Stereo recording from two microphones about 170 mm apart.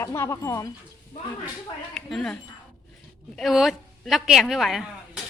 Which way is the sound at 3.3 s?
Centre (ahead or behind).